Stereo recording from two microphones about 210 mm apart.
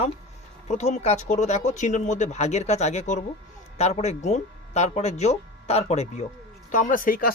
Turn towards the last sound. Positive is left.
turn(degrees=45)  # may be behind; listen again after turning